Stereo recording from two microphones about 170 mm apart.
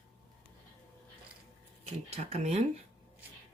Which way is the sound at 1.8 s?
40° right (ahead or behind).